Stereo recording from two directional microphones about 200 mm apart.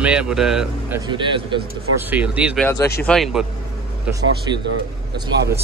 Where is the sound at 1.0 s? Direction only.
25° right (ahead or behind).